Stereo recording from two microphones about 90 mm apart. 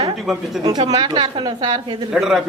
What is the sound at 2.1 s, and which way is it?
Speech, 5° right (ahead or behind).